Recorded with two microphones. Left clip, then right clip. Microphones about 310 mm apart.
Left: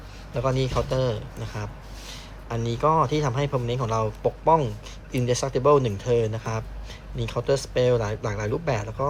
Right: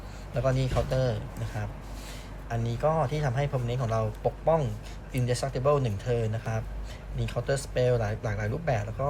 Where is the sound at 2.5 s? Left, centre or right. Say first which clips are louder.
Left 5 dB; centre.